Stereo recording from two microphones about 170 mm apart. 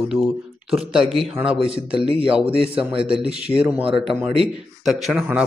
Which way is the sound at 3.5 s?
10° right (ahead or behind).